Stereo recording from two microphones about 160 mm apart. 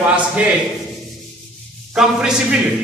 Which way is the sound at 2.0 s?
5° right (ahead or behind).